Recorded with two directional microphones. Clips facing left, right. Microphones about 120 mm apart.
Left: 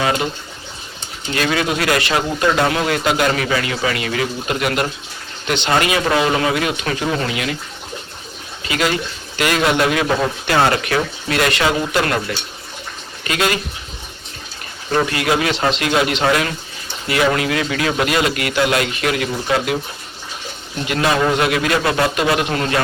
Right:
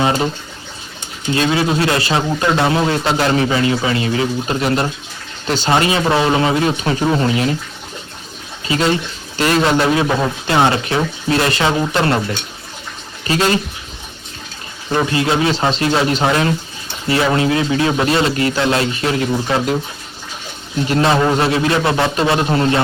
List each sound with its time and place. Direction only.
0.0 s speech: 30° right (ahead or behind)
1.3 s speech: 25° right (ahead or behind)
8.6 s speech: 30° right (ahead or behind)
15.0 s speech: 25° right (ahead or behind)
20.8 s speech: 35° right (ahead or behind)